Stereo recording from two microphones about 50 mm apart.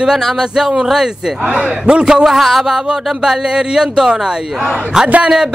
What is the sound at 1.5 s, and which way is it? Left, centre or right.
Speech, right.